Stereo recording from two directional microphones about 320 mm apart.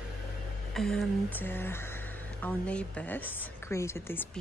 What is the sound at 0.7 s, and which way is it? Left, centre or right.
Speech, centre.